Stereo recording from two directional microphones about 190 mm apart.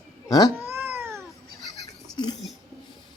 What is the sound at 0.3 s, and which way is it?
Speech, 20° left (ahead or behind).